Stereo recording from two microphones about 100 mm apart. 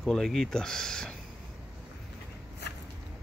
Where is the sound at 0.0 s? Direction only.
5° left (ahead or behind).